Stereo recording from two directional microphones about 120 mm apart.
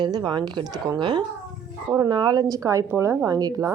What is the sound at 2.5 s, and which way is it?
A woman's voice, 25° right (ahead or behind).